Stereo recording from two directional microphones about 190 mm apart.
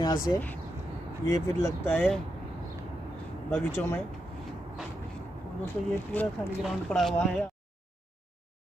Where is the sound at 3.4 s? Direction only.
5° left (ahead or behind).